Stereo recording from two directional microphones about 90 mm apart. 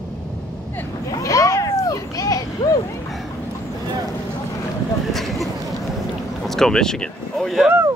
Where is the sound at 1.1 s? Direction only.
40° left (ahead or behind).